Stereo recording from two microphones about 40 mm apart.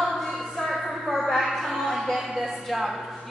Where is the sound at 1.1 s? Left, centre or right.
Centre.